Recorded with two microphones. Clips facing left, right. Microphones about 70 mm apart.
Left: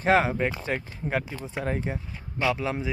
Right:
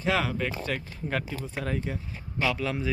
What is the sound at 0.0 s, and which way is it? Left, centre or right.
A man's voice, left.